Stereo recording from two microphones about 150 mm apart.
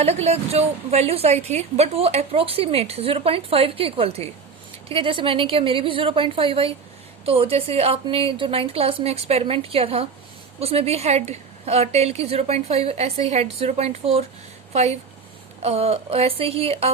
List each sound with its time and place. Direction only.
0.0 s a woman's voice: 45° right (ahead or behind)